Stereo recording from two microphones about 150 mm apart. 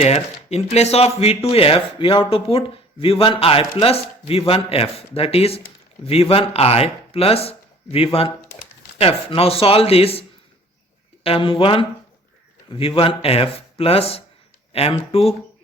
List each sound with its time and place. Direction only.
0.0 s speech: 45° left (ahead or behind)